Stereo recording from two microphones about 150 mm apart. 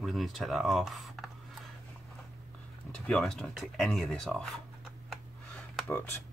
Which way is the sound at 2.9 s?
5° left (ahead or behind).